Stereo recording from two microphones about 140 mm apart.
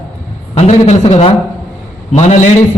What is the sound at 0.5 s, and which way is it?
A man's voice, 50° left (ahead or behind).